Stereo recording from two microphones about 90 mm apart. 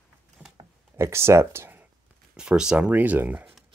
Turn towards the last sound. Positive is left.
turn(degrees=-20)  # may be behind; listen again after turning